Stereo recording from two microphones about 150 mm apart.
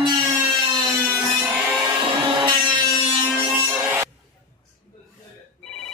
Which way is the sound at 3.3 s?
5° right (ahead or behind).